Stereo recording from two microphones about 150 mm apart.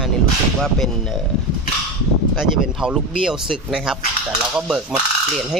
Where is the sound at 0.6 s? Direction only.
Centre (ahead or behind).